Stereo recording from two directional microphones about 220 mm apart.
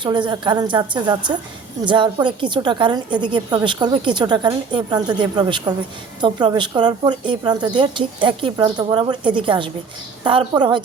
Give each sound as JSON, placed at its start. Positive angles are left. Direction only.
{"t": 0.0, "sound": "a woman's voice", "side_deg": -20}